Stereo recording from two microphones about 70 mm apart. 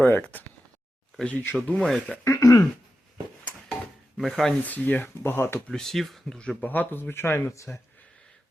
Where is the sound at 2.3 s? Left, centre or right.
Left.